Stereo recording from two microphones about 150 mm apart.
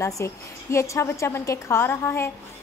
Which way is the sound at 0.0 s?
20° left (ahead or behind).